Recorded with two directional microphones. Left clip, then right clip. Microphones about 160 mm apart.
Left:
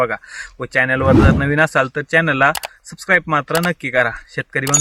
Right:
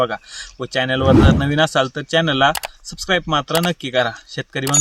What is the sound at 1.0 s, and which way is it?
Speech, centre (ahead or behind).